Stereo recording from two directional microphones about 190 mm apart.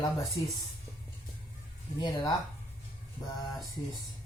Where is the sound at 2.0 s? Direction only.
20° left (ahead or behind).